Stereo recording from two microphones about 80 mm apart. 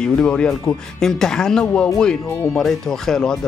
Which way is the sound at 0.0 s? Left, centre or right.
Centre.